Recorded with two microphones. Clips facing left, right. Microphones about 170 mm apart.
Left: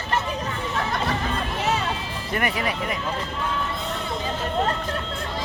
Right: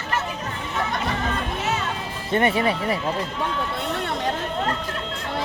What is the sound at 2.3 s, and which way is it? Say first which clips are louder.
Speech: right 5 dB; 25° right (ahead or behind).